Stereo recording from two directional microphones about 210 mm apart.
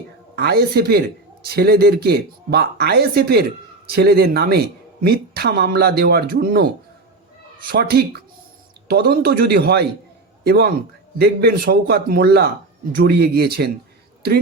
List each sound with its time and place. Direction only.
0.3 s a man's voice: 50° right (ahead or behind)
7.7 s a man's voice: 50° right (ahead or behind)